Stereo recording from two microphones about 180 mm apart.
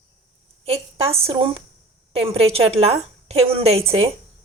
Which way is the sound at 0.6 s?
35° right (ahead or behind).